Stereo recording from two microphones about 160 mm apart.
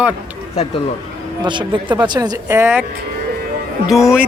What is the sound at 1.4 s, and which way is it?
Speech, 30° right (ahead or behind).